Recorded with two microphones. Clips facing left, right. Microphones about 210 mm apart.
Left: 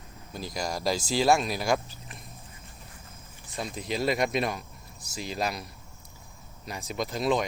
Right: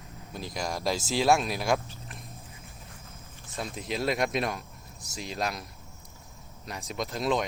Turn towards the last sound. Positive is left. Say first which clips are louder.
# left 2 dB
turn(degrees=0)  # may be behind; listen again after turning